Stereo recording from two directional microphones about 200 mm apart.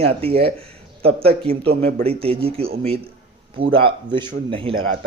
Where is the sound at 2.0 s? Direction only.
30° right (ahead or behind).